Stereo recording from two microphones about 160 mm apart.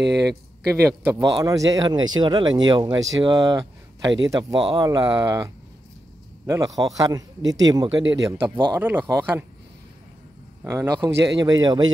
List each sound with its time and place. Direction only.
0.7 s speech: 15° right (ahead or behind)
10.6 s speech: 15° right (ahead or behind)